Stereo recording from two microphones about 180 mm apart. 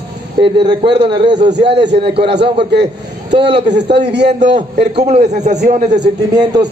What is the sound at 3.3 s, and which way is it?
A man's voice, 70° right (ahead or behind).